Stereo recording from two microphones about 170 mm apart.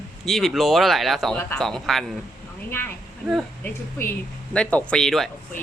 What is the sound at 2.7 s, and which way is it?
Speech, 15° left (ahead or behind).